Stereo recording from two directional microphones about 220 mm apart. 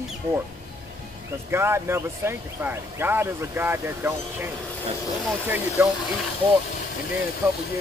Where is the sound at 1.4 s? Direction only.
10° right (ahead or behind).